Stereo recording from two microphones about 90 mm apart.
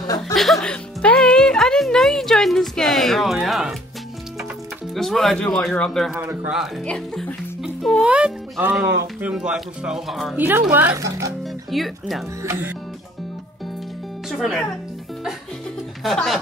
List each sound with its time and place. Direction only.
0.3 s speech: centre (ahead or behind)
4.9 s speech: 5° left (ahead or behind)
6.1 s speech: 20° right (ahead or behind)
6.8 s speech: 10° left (ahead or behind)
8.0 s a child's voice: 10° right (ahead or behind)
10.3 s speech: 20° right (ahead or behind)
11.0 s a child's voice: 40° right (ahead or behind)
11.4 s speech: centre (ahead or behind)
12.4 s a child's voice: 35° right (ahead or behind)
14.3 s speech: 5° left (ahead or behind)
16.0 s speech: centre (ahead or behind)